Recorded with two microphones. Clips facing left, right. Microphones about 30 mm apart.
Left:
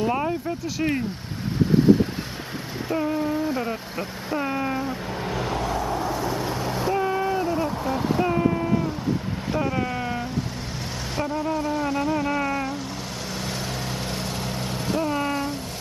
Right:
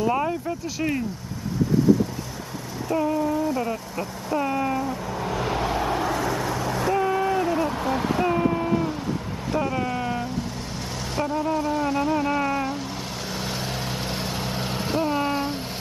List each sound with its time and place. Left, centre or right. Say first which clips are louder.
0.1 s speech: right 1 dB; centre
3.2 s speech: right 1 dB; left
4.4 s a sound: right 2 dB; centre
4.7 s speech: right 1 dB; left
5.8 s vehicle: right 2 dB; right
6.4 s vehicle: right 1 dB; centre
6.8 s vehicle: right 1 dB; centre
7.5 s a sound: right 1 dB; centre
9.5 s vehicle: right 1 dB; centre
11.1 s a sound: right 1 dB; centre
13.4 s vehicle: right 1 dB; centre